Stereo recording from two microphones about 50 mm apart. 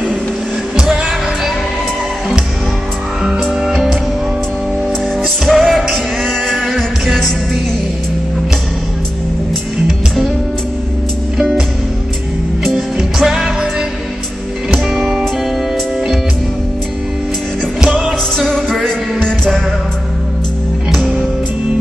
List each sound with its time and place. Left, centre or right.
3.6 s music: centre
5.2 s music: centre
9.8 s music: centre
12.6 s music: centre
17.7 s music: centre
18.4 s music: centre